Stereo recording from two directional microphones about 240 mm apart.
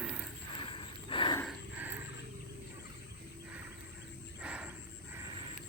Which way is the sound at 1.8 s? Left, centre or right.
Centre.